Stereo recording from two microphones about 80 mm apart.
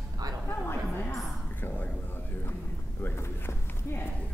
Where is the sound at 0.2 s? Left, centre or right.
Right.